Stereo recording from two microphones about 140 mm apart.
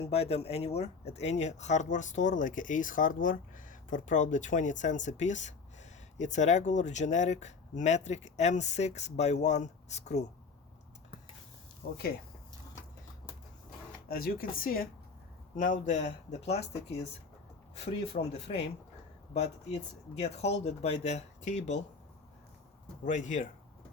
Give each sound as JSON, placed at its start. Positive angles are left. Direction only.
{"t": 0.0, "sound": "speech", "side_deg": 45}
{"t": 14.1, "sound": "speech", "side_deg": 90}
{"t": 15.5, "sound": "speech", "side_deg": 65}
{"t": 23.0, "sound": "speech", "side_deg": 60}